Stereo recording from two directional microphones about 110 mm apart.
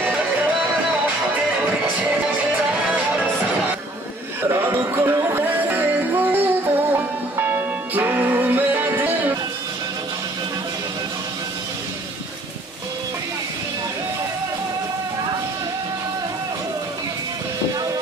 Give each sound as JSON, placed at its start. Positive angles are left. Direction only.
{"t": 4.5, "sound": "music", "side_deg": -25}